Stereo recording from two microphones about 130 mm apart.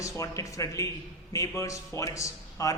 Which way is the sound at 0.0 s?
25° left (ahead or behind).